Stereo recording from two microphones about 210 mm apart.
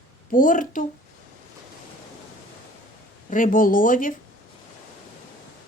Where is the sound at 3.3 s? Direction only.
40° left (ahead or behind).